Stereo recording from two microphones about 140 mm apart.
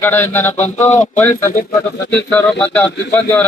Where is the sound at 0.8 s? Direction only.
60° left (ahead or behind).